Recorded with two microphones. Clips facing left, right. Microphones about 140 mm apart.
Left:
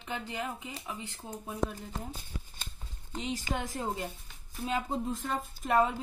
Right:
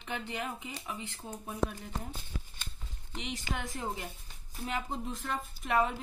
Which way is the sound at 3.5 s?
20° left (ahead or behind).